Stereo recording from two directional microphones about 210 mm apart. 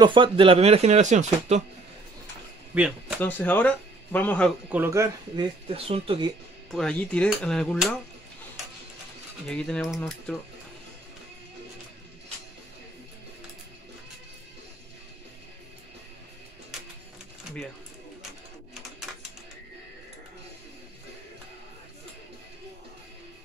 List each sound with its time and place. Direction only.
0.0 s speech: 25° right (ahead or behind)
2.7 s speech: 5° right (ahead or behind)
3.2 s speech: 10° left (ahead or behind)
4.7 s speech: 15° right (ahead or behind)
6.7 s speech: 5° left (ahead or behind)
9.5 s speech: 5° left (ahead or behind)
19.1 s bird: centre (ahead or behind)